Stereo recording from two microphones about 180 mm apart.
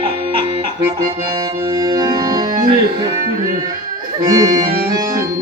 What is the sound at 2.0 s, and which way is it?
Music, 20° right (ahead or behind).